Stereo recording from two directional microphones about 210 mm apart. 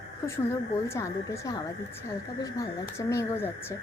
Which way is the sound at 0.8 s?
15° left (ahead or behind).